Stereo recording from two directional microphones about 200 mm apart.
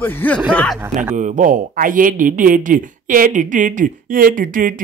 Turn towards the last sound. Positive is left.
turn(degrees=-45)  # may be behind; listen again after turning